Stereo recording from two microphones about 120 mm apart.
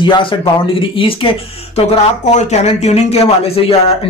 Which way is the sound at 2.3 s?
70° left (ahead or behind).